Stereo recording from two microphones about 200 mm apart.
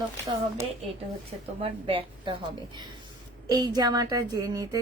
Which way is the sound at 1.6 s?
25° right (ahead or behind).